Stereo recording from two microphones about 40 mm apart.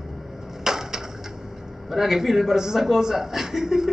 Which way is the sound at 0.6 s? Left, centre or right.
Centre.